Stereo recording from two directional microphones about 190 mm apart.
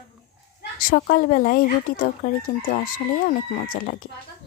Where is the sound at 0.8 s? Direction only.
45° left (ahead or behind).